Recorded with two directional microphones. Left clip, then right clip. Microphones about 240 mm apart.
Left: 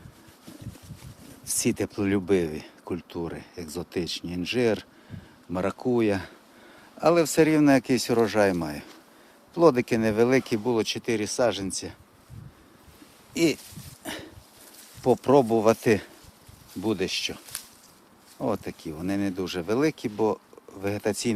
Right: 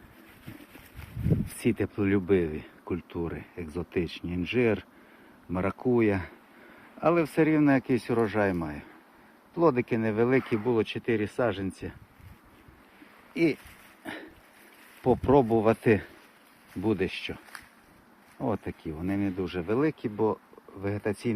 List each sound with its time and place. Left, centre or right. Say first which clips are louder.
1.5 s speech: left 4 dB; centre
13.3 s speech: left 2 dB; centre
14.0 s dog: left 3 dB; centre
15.0 s speech: left 3 dB; centre